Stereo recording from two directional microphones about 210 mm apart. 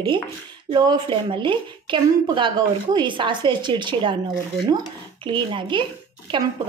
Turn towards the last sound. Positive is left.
turn(degrees=-25)  # may be behind; listen again after turning